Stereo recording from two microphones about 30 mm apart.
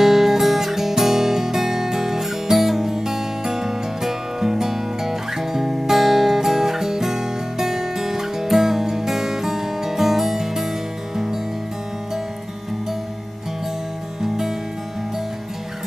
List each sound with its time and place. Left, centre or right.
0.0 s guitar: centre
14.2 s music: centre